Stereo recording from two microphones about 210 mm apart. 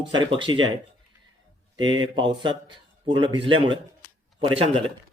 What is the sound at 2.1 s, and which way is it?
Speech, 20° right (ahead or behind).